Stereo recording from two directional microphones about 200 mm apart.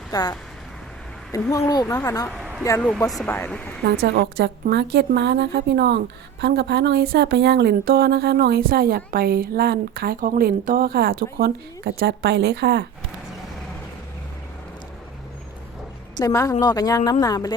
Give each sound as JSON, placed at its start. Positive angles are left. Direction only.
{"t": 0.1, "sound": "a woman's voice", "side_deg": 20}
{"t": 4.0, "sound": "a woman's voice", "side_deg": -55}
{"t": 16.1, "sound": "a woman's voice", "side_deg": 15}